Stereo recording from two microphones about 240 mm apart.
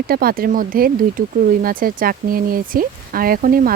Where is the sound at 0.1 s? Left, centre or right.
Right.